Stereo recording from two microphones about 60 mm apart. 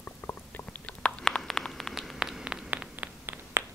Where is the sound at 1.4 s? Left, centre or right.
Centre.